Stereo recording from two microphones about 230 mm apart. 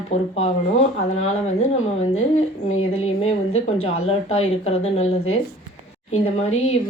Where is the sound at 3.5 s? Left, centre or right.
Left.